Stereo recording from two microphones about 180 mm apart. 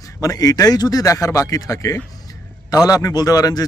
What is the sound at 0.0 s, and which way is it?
A man's voice, 20° left (ahead or behind).